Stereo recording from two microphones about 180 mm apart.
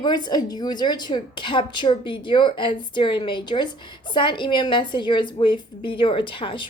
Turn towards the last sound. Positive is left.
turn(degrees=30)  # may be behind; listen again after turning